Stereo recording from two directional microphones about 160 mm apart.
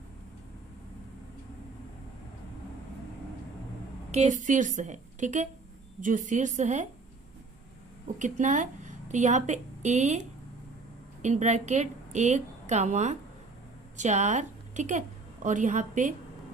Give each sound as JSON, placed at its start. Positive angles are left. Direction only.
{"t": 4.1, "sound": "a woman's voice", "side_deg": -50}
{"t": 8.0, "sound": "a woman's voice", "side_deg": -50}